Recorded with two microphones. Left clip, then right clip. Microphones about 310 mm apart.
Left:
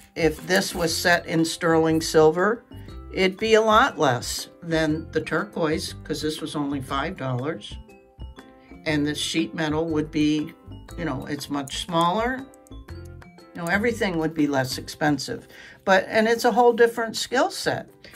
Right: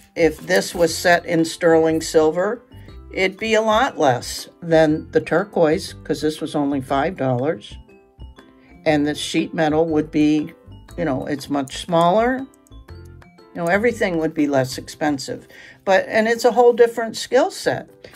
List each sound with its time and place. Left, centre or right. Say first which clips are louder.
0.1 s speech: right 5 dB; centre
8.8 s speech: right 6 dB; centre
13.5 s speech: right 6 dB; centre